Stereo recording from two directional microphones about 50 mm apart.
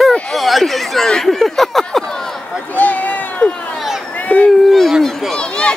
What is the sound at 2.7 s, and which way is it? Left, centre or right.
Run, left.